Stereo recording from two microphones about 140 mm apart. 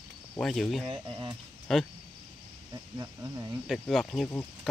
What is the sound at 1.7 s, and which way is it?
Cricket, centre (ahead or behind).